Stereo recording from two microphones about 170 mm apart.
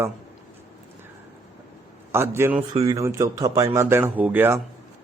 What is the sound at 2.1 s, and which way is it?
Speech, 15° right (ahead or behind).